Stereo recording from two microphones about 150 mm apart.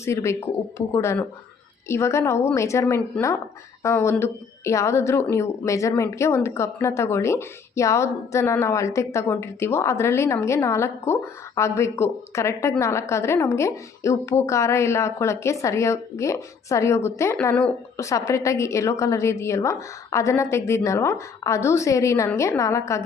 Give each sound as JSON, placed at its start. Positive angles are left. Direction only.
{"t": 0.0, "sound": "a woman's voice", "side_deg": 20}